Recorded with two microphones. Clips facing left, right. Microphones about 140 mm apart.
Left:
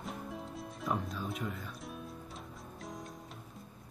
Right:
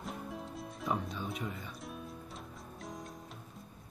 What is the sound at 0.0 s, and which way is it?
Music, centre (ahead or behind).